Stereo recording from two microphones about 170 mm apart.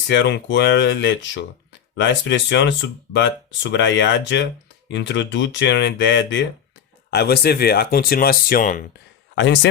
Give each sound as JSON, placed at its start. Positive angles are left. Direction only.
{"t": 0.1, "sound": "speech", "side_deg": 85}
{"t": 7.1, "sound": "speech", "side_deg": 70}
{"t": 9.3, "sound": "a man's voice", "side_deg": 90}